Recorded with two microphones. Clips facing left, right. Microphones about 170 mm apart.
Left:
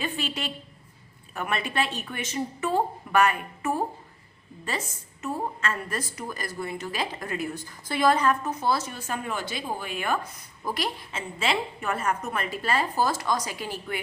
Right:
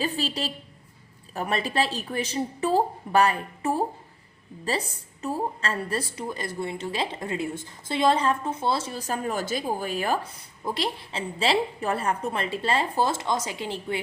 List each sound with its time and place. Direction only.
0.0 s a woman's voice: 35° right (ahead or behind)
5.2 s a woman's voice: 35° right (ahead or behind)
10.6 s a woman's voice: 25° right (ahead or behind)